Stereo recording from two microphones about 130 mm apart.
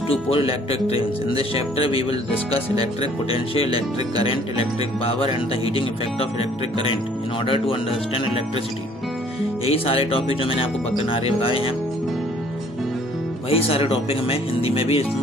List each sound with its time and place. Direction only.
0.3 s speech: 45° left (ahead or behind)
2.7 s speech: 30° right (ahead or behind)
3.3 s speech: 50° left (ahead or behind)
7.4 s speech: 45° left (ahead or behind)
9.7 s speech: 45° left (ahead or behind)
13.5 s speech: 50° left (ahead or behind)